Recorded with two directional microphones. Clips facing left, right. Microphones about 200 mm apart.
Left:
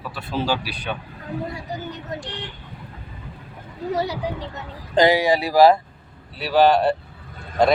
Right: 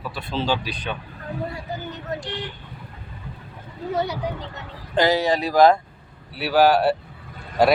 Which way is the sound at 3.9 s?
35° left (ahead or behind).